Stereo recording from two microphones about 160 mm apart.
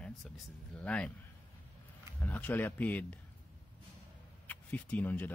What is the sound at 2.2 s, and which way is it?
Speech, 10° left (ahead or behind).